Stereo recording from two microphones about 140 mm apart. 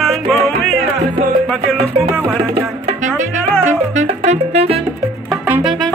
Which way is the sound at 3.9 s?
55° right (ahead or behind).